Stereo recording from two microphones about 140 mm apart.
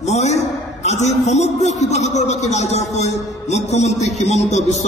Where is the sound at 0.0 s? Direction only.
55° left (ahead or behind).